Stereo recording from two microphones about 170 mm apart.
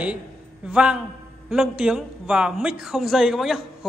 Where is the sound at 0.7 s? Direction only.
5° right (ahead or behind).